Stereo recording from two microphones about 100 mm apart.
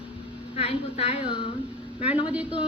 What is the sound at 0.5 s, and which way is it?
Speech, 90° left.